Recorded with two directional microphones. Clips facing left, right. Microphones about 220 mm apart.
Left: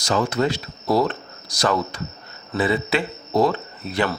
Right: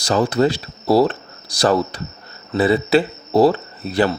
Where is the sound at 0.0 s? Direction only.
35° right (ahead or behind).